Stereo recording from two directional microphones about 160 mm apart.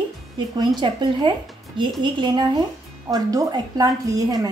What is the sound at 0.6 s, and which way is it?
Speech, 30° right (ahead or behind).